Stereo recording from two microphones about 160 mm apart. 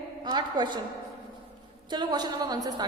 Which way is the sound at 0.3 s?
25° right (ahead or behind).